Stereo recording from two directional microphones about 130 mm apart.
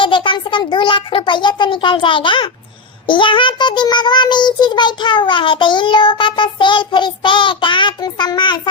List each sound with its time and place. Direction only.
0.0 s a child's voice: 40° left (ahead or behind)
3.1 s child singing: 40° left (ahead or behind)